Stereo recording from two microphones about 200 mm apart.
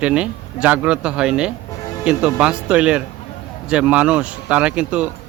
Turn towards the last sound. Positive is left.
turn(degrees=-5)  # may be behind; listen again after turning